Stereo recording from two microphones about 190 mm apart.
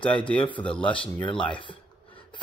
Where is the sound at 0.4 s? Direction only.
25° left (ahead or behind).